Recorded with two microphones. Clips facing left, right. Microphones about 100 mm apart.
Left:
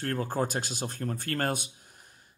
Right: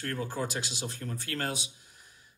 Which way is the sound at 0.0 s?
45° left (ahead or behind).